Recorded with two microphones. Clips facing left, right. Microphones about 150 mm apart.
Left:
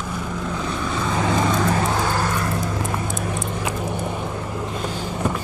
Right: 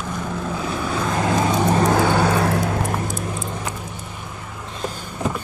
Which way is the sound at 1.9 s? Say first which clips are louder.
Right 5 dB; 65° right (ahead or behind).